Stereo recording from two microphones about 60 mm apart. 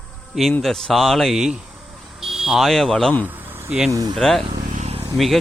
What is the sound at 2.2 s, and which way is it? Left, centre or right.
Vehicle, centre.